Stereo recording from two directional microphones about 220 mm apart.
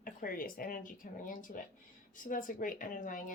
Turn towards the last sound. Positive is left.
turn(degrees=35)  # may be behind; listen again after turning